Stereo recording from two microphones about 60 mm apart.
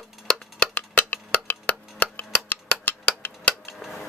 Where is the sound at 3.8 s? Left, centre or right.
Centre.